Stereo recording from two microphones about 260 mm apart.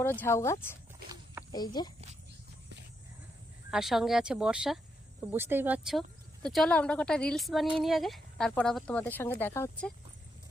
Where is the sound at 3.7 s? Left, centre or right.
Centre.